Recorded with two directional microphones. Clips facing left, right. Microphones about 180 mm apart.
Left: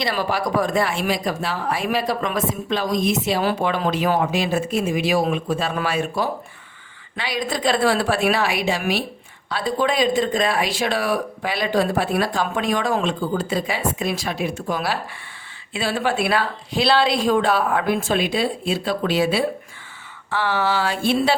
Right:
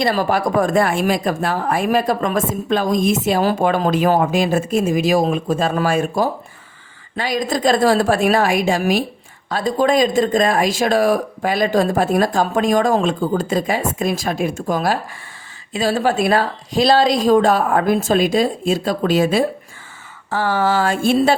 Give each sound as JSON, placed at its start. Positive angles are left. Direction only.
{"t": 0.0, "sound": "speech", "side_deg": -45}